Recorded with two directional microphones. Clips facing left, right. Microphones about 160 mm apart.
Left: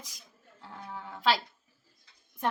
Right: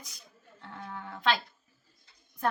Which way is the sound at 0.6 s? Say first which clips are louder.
Right 1 dB; 10° left (ahead or behind).